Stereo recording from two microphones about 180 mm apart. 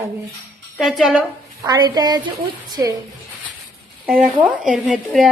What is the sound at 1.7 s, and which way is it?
A woman's voice, 20° right (ahead or behind).